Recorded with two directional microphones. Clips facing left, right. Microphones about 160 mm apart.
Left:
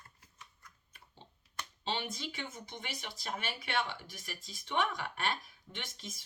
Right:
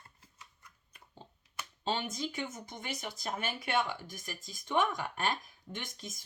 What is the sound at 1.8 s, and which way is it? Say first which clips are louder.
Speech: right 4 dB; 45° right (ahead or behind).